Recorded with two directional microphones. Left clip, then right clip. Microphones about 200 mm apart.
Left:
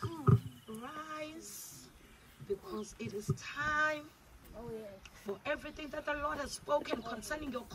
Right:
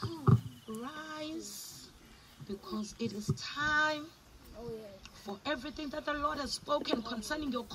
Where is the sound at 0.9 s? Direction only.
40° right (ahead or behind).